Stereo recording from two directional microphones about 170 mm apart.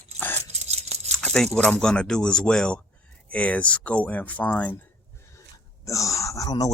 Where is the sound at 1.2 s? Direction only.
5° left (ahead or behind).